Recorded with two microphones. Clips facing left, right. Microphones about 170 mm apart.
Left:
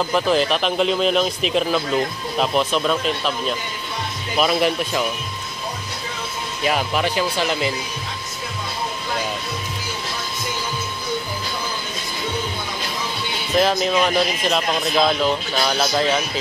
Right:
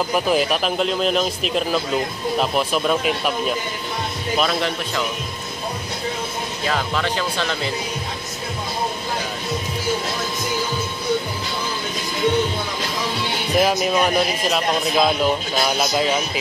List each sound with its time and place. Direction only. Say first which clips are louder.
0.1 s a man's voice: left 1 dB; 10° right (ahead or behind)
4.4 s speech: left 4 dB; 10° left (ahead or behind)
6.6 s speech: left 3 dB; 15° left (ahead or behind)
13.6 s a man's voice: even; 10° right (ahead or behind)